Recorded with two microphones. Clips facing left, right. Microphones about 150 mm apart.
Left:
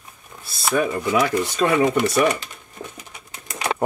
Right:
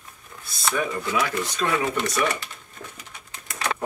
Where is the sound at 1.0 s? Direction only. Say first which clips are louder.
Left 6 dB; 15° left (ahead or behind).